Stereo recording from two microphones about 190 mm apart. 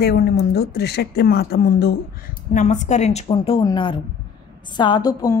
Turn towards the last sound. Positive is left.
turn(degrees=20)  # may be behind; listen again after turning